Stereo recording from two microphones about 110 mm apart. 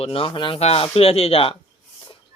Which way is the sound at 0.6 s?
65° left (ahead or behind).